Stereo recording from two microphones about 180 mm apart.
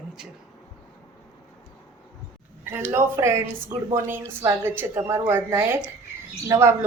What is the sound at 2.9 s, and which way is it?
A woman's voice, 15° right (ahead or behind).